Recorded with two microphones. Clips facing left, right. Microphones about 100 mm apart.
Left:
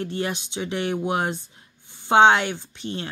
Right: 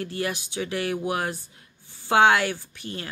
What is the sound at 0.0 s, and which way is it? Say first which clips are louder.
Speech: left 2 dB; 25° left (ahead or behind).